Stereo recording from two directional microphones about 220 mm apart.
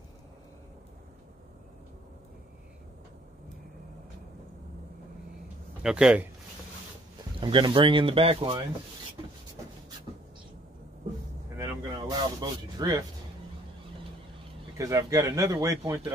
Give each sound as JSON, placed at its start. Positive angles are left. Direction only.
{"t": 5.8, "sound": "speech", "side_deg": -5}
{"t": 7.3, "sound": "speech", "side_deg": -20}
{"t": 11.5, "sound": "speech", "side_deg": -15}
{"t": 14.8, "sound": "speech", "side_deg": -15}